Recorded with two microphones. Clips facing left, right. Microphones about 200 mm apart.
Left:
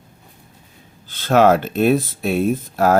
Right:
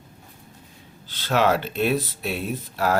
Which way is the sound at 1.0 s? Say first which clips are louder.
Left 7 dB; 50° left (ahead or behind).